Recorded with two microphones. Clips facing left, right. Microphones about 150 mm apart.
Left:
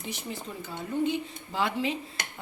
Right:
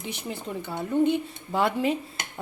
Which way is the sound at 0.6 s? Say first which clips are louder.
Right 6 dB; 60° right (ahead or behind).